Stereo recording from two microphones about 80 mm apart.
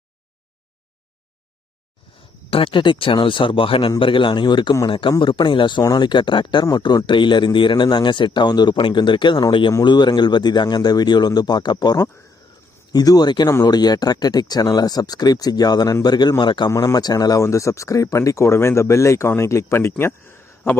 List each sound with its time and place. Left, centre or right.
2.6 s a man's voice: left
4.9 s a man's voice: left
5.8 s speech: left
6.7 s a man's voice: left
9.8 s speech: left
16.4 s speech: left
16.6 s speech: left